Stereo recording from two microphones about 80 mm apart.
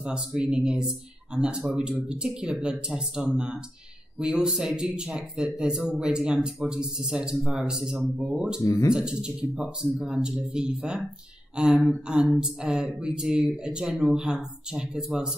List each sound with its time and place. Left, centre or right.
0.0 s speech: centre